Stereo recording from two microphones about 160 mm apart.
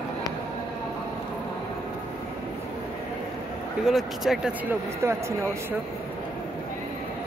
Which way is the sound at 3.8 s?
Centre (ahead or behind).